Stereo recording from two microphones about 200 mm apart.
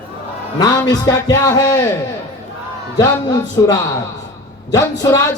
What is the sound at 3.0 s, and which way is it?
A man's voice, 20° left (ahead or behind).